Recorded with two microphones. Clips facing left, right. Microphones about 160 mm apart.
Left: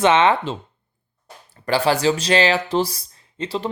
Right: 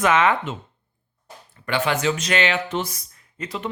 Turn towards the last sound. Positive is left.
turn(degrees=30)  # may be behind; listen again after turning